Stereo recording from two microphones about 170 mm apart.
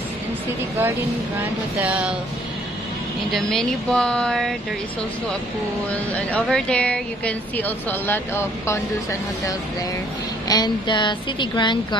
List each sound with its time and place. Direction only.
1.8 s speech: 5° right (ahead or behind)
3.3 s speech: centre (ahead or behind)
5.9 s a woman's voice: 10° left (ahead or behind)
10.5 s a woman's voice: 25° left (ahead or behind)